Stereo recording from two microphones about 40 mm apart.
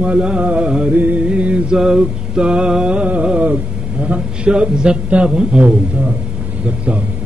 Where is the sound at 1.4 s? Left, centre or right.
Right.